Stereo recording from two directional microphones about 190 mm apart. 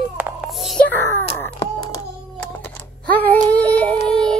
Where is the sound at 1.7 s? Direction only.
20° left (ahead or behind).